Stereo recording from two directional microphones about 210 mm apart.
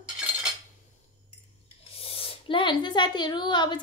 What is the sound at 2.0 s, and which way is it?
A woman's voice, 25° left (ahead or behind).